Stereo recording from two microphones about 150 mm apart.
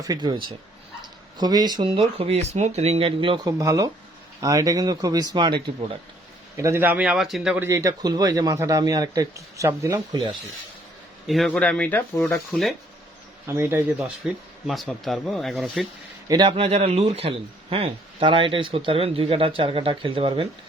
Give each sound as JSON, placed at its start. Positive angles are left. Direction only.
{"t": 0.0, "sound": "speech", "side_deg": -25}
{"t": 3.4, "sound": "speech", "side_deg": -20}
{"t": 6.6, "sound": "speech", "side_deg": -15}
{"t": 11.3, "sound": "speech", "side_deg": 5}
{"t": 13.5, "sound": "speech", "side_deg": -15}
{"t": 14.2, "sound": "speech", "side_deg": -5}
{"t": 16.3, "sound": "speech", "side_deg": -35}